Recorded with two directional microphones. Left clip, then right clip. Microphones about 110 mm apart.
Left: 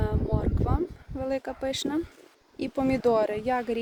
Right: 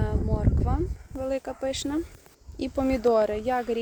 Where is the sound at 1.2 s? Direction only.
35° left (ahead or behind).